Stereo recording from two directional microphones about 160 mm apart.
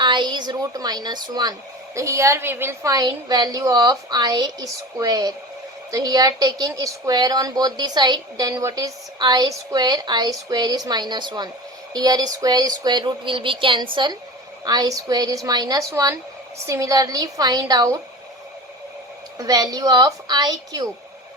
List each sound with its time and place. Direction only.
0.0 s a woman's voice: 30° right (ahead or behind)
19.4 s a woman's voice: 25° right (ahead or behind)